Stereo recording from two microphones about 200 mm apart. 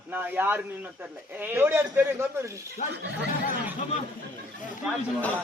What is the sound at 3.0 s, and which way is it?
Speech, 60° right (ahead or behind).